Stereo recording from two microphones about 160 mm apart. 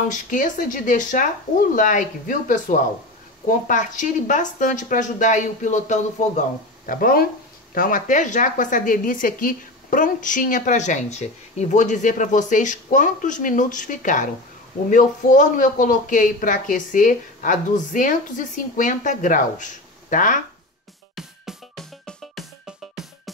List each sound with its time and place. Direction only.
0.1 s speech: 55° left (ahead or behind)
6.9 s speech: 65° left (ahead or behind)
21.1 s music: centre (ahead or behind)